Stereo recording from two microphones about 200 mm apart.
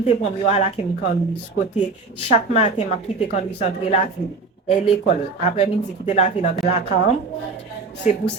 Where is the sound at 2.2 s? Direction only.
35° left (ahead or behind).